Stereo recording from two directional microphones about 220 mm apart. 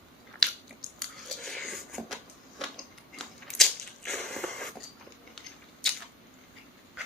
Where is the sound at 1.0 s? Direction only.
Centre (ahead or behind).